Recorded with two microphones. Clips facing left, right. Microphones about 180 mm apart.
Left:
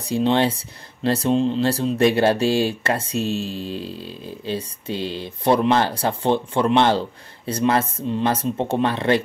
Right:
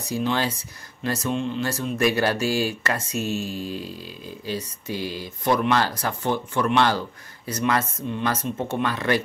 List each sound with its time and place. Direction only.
0.0 s speech: 30° left (ahead or behind)